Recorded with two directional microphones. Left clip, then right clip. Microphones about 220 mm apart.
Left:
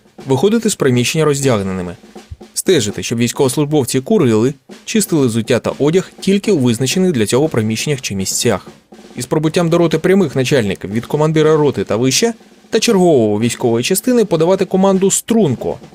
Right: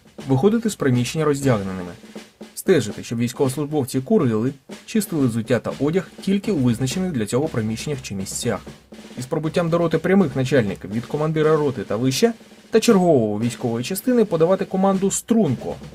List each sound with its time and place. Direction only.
0.3 s speech: 40° left (ahead or behind)